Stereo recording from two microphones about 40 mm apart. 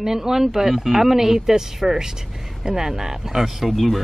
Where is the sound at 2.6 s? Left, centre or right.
Centre.